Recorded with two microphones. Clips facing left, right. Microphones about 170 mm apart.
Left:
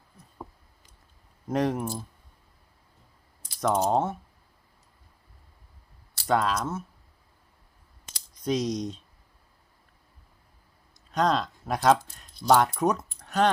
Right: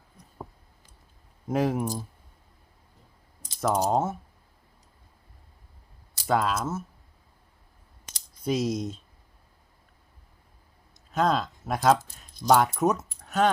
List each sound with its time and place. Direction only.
1.5 s speech: 5° right (ahead or behind)
3.6 s speech: 5° right (ahead or behind)
6.2 s speech: centre (ahead or behind)
8.4 s speech: 5° right (ahead or behind)
11.1 s speech: 5° right (ahead or behind)